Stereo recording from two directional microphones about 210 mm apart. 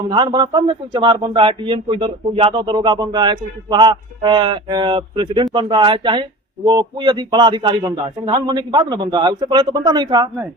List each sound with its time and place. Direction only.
0.1 s a man's voice: 20° right (ahead or behind)